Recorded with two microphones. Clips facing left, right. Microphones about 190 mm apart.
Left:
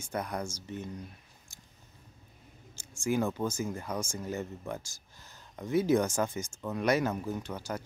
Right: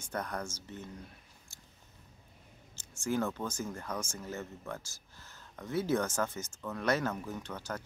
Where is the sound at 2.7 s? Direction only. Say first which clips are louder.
Left 3 dB; 10° left (ahead or behind).